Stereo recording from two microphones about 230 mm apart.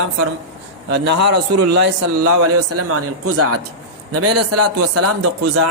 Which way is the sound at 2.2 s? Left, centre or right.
Right.